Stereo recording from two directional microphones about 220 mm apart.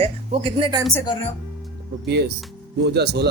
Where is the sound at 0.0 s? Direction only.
25° right (ahead or behind).